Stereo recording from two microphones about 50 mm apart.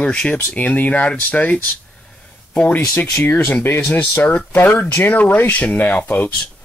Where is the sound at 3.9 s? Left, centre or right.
Left.